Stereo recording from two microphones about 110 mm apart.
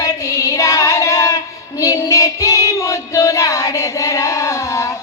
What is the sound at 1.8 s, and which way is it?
Child singing, 30° left (ahead or behind).